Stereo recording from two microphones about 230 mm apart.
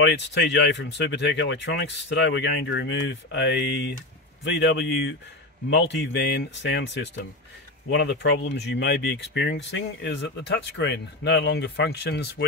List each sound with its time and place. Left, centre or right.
0.0 s speech: left